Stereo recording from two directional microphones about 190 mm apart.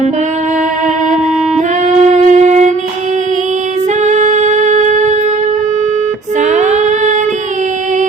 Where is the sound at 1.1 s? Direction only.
40° right (ahead or behind).